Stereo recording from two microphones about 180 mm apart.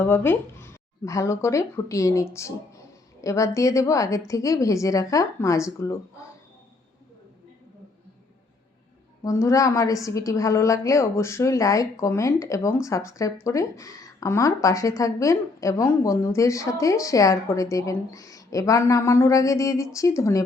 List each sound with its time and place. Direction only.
0.0 s a woman's voice: 10° left (ahead or behind)
9.2 s a woman's voice: 15° left (ahead or behind)